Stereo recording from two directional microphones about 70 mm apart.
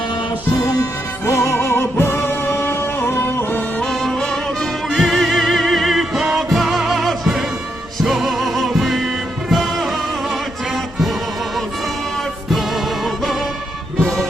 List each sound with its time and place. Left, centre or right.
1.3 s music: left
3.8 s music: centre